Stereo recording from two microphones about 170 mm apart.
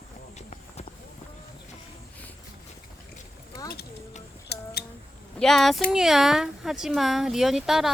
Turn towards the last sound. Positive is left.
turn(degrees=0)  # may be behind; listen again after turning